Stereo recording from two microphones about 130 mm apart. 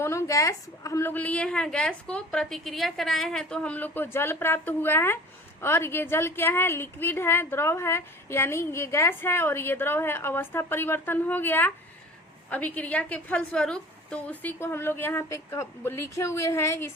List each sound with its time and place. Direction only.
0.0 s a woman's voice: 20° left (ahead or behind)